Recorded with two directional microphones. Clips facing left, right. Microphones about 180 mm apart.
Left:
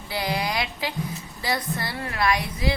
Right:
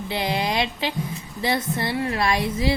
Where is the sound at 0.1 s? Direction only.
25° right (ahead or behind).